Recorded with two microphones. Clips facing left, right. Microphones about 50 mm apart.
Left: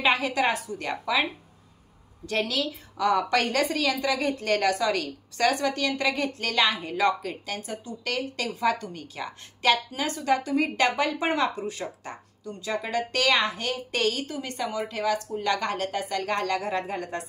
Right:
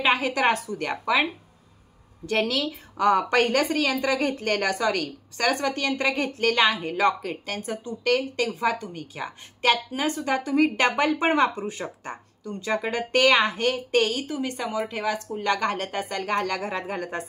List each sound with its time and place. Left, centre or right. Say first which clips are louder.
0.0 s a sound: right 1 dB; centre
0.3 s a woman's voice: right 3 dB; right
2.2 s a woman's voice: right 3 dB; right
13.9 s a woman's voice: right 1 dB; right